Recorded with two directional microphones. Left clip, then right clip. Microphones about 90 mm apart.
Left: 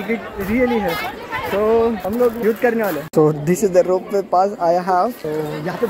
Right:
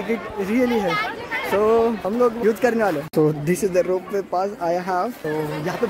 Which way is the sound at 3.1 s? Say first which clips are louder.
Left 4 dB; 5° left (ahead or behind).